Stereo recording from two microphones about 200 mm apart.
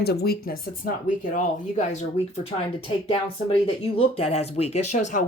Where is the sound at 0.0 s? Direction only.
55° left (ahead or behind).